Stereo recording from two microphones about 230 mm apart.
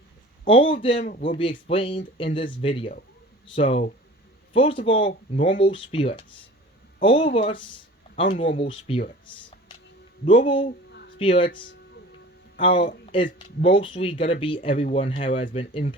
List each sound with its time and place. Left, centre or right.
0.4 s speech: left
10.2 s speech: left
12.5 s speech: left